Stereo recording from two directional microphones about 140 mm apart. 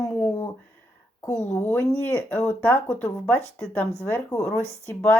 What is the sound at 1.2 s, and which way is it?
Speech, 20° left (ahead or behind).